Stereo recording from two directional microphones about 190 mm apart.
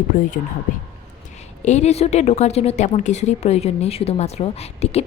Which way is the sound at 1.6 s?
35° left (ahead or behind).